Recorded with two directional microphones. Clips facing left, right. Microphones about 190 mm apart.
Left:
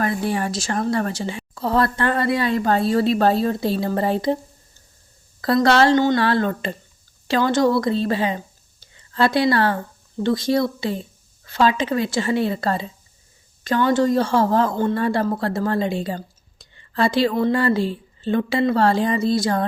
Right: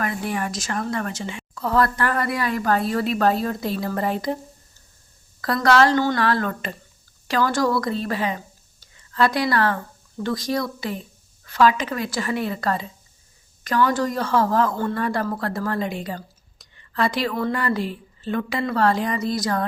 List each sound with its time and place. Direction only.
0.0 s a woman's voice: 30° left (ahead or behind)
5.4 s a woman's voice: 25° left (ahead or behind)